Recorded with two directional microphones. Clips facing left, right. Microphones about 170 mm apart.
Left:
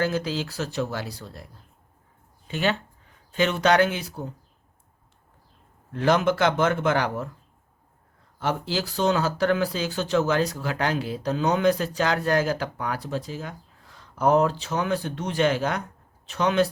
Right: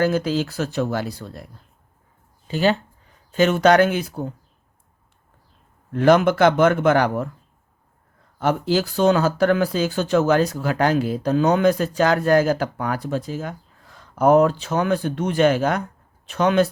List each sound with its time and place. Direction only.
0.0 s speech: 45° right (ahead or behind)
2.5 s speech: 35° right (ahead or behind)
5.9 s a man's voice: 55° right (ahead or behind)
8.4 s speech: 50° right (ahead or behind)